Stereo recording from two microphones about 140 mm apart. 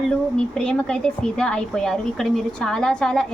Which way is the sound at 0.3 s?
5° left (ahead or behind).